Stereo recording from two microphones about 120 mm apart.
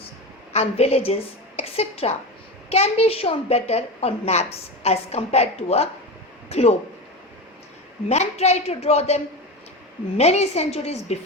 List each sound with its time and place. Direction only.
0.5 s a woman's voice: 60° left (ahead or behind)
8.1 s a woman's voice: 65° left (ahead or behind)